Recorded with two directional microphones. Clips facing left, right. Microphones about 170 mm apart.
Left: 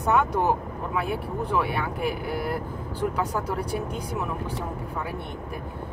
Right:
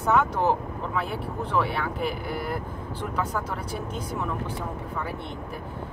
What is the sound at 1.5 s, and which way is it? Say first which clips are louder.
Speech: right 1 dB; 10° left (ahead or behind).